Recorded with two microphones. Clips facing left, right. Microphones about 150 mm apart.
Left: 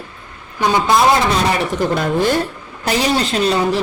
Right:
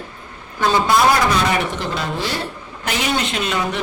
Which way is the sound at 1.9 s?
50° left (ahead or behind).